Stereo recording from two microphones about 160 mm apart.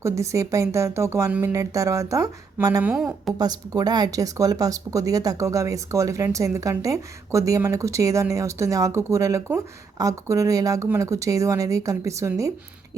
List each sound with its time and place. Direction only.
0.0 s speech: 20° right (ahead or behind)
2.8 s speech: 5° right (ahead or behind)
3.3 s speech: 25° right (ahead or behind)